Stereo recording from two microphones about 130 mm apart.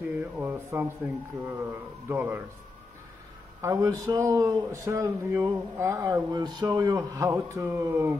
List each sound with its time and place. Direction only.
0.4 s speech: 20° right (ahead or behind)
3.6 s speech: 25° right (ahead or behind)
6.3 s speech: 30° right (ahead or behind)